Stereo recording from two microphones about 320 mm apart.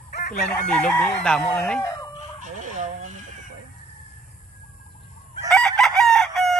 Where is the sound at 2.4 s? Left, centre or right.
Right.